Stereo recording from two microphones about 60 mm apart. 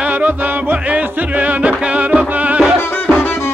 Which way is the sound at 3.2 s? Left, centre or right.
Left.